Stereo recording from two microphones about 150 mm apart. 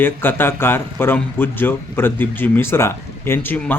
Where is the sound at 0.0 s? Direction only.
15° left (ahead or behind).